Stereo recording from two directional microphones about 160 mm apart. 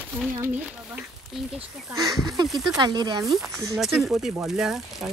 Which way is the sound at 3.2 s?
Centre (ahead or behind).